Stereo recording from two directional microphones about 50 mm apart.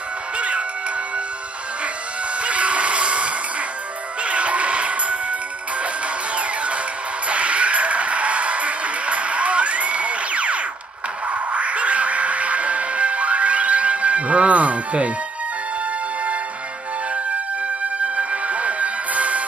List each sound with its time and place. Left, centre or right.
0.4 s music: right
2.4 s music: right
17.8 s music: right